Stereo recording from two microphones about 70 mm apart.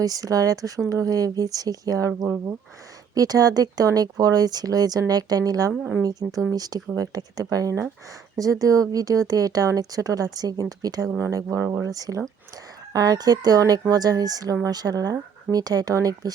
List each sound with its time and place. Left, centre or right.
0.0 s speech: right